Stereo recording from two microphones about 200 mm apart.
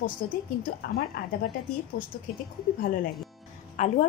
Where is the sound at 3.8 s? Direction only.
35° left (ahead or behind).